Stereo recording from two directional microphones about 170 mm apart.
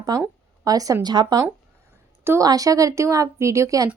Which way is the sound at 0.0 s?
20° right (ahead or behind).